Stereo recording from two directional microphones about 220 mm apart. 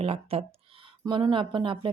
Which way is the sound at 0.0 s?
25° right (ahead or behind).